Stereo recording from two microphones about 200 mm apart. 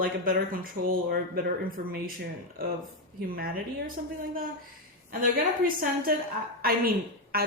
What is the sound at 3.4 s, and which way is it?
Speech, 45° right (ahead or behind).